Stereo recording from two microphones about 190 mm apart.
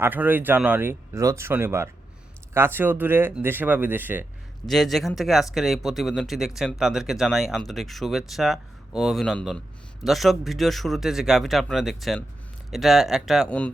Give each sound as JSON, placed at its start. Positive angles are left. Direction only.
{"t": 0.0, "sound": "speech", "side_deg": -10}
{"t": 4.7, "sound": "speech", "side_deg": 0}